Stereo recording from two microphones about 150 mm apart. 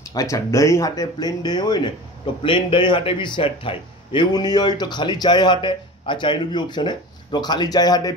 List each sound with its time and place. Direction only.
0.1 s a man's voice: 20° left (ahead or behind)